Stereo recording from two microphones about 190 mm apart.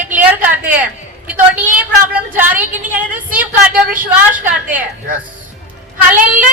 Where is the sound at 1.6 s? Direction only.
45° right (ahead or behind).